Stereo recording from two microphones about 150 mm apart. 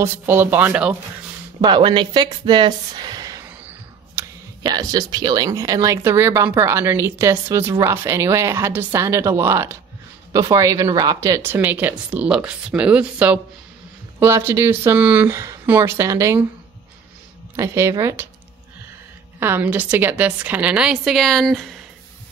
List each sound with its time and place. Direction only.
0.0 s a woman's voice: 15° right (ahead or behind)
1.6 s speech: 30° right (ahead or behind)
3.4 s a sound: 15° right (ahead or behind)
4.6 s a woman's voice: 25° right (ahead or behind)
17.6 s a woman's voice: 20° right (ahead or behind)
19.4 s a woman's voice: 15° right (ahead or behind)